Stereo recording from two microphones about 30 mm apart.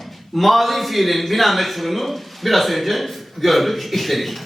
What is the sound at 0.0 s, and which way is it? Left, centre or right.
A man's voice, centre.